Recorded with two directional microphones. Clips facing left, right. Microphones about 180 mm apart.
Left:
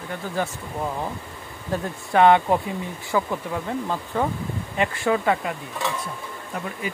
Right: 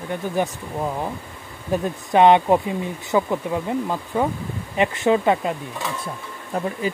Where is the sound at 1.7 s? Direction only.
20° right (ahead or behind).